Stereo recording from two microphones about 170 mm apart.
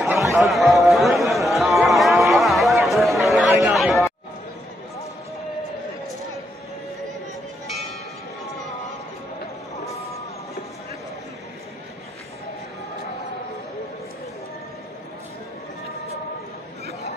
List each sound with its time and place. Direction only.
0.1 s a sound: 15° right (ahead or behind)
0.4 s speech: centre (ahead or behind)
1.2 s music: centre (ahead or behind)